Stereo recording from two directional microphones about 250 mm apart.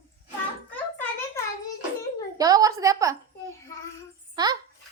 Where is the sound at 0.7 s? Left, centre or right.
Centre.